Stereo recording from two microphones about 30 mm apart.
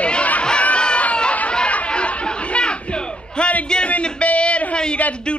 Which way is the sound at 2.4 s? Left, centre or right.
Left.